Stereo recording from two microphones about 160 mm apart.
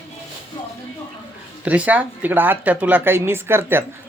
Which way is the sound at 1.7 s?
10° right (ahead or behind).